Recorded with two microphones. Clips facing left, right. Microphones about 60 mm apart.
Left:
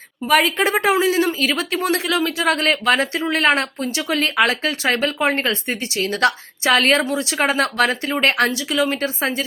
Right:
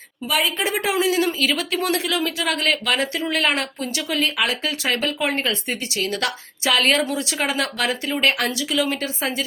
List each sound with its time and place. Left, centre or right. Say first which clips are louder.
0.3 s speech: left 6 dB; left